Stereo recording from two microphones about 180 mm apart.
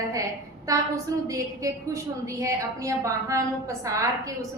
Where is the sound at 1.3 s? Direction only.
20° right (ahead or behind).